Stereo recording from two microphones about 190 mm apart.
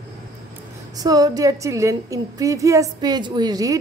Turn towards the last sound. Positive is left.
turn(degrees=-20)  # may be behind; listen again after turning